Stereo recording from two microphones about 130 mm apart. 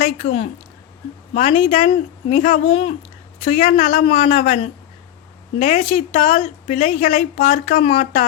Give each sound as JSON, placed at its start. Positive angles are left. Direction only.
{"t": 0.0, "sound": "a woman's voice", "side_deg": 60}
{"t": 1.5, "sound": "speech", "side_deg": 55}
{"t": 3.4, "sound": "a woman's voice", "side_deg": 65}